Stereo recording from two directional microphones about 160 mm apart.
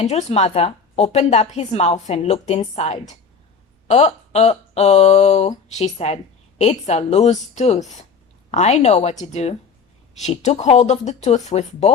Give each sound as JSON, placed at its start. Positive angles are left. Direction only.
{"t": 0.0, "sound": "a woman's voice", "side_deg": 45}